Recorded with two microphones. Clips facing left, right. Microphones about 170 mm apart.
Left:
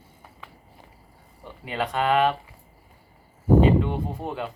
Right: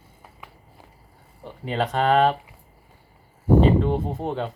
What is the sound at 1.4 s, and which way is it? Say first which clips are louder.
Speech: right 3 dB; 30° right (ahead or behind).